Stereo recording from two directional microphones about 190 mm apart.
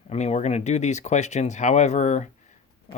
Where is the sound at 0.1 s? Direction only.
35° left (ahead or behind).